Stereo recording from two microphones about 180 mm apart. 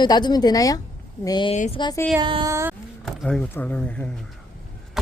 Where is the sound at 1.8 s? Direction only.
20° left (ahead or behind).